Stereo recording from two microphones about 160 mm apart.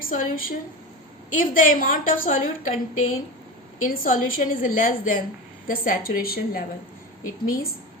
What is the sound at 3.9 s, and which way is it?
A woman's voice, 60° left (ahead or behind).